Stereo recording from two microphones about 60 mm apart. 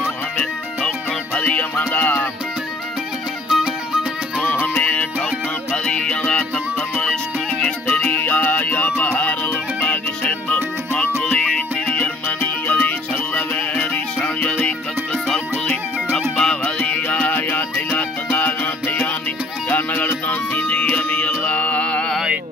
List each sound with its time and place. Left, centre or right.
1.4 s music: left
3.4 s music: centre
4.4 s music: left
8.0 s music: left
10.2 s music: left
11.3 s music: centre
16.3 s music: centre